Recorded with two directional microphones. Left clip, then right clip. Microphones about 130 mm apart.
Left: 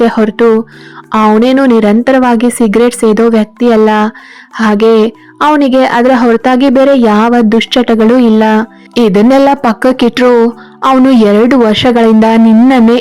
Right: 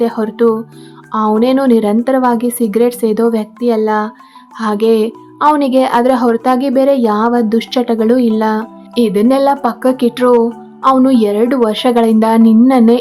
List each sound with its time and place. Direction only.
0.0 s a woman's voice: 40° left (ahead or behind)